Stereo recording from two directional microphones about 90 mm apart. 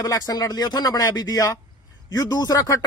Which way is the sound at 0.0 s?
40° left (ahead or behind).